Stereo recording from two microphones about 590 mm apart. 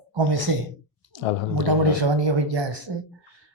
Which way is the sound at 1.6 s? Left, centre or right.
Right.